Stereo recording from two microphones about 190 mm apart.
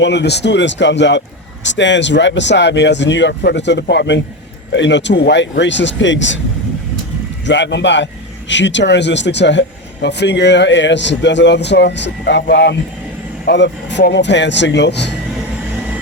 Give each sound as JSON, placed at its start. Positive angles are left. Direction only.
{"t": 0.0, "sound": "speech", "side_deg": 65}
{"t": 7.4, "sound": "speech", "side_deg": 70}